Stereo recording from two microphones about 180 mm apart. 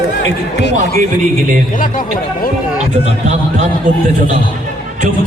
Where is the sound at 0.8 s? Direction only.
45° right (ahead or behind).